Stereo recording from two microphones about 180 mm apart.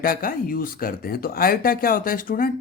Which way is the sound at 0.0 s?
55° left (ahead or behind).